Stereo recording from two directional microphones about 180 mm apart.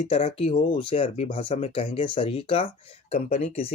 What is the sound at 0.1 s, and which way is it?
Speech, 30° left (ahead or behind).